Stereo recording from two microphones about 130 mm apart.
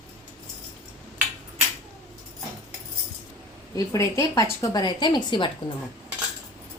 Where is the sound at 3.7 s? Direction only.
25° left (ahead or behind).